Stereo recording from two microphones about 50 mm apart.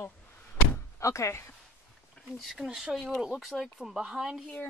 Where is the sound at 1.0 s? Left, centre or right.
Left.